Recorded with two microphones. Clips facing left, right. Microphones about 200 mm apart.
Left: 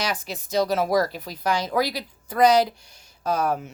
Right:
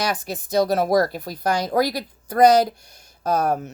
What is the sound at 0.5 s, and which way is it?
Speech, 50° right (ahead or behind).